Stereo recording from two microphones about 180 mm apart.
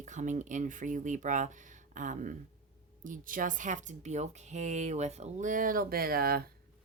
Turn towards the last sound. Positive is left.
turn(degrees=-55)  # may be behind; listen again after turning